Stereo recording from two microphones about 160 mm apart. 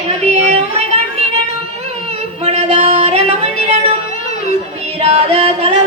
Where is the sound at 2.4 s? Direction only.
40° right (ahead or behind).